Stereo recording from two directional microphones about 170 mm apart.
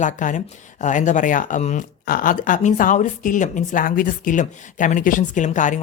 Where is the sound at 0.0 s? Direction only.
45° left (ahead or behind).